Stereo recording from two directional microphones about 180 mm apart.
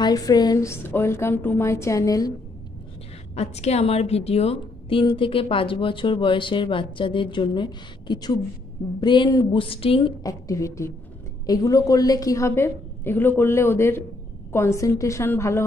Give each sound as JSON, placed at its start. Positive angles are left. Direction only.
{"t": 0.0, "sound": "a woman's voice", "side_deg": 20}
{"t": 3.3, "sound": "a woman's voice", "side_deg": 35}